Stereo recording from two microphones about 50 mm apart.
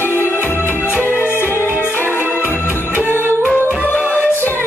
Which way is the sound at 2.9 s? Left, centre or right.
Right.